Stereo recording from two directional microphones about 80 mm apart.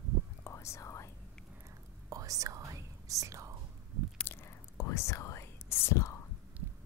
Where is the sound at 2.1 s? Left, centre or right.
Right.